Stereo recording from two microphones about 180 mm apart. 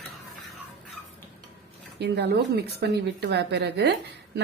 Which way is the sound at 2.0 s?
65° right (ahead or behind).